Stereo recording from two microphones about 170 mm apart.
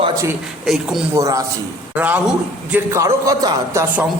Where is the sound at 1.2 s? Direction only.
20° right (ahead or behind).